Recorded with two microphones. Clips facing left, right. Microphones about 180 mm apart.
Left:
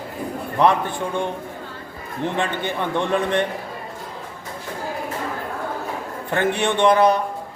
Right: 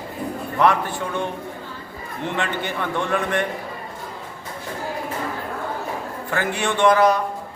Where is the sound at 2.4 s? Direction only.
15° left (ahead or behind).